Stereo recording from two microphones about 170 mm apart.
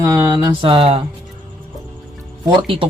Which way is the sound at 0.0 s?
20° right (ahead or behind).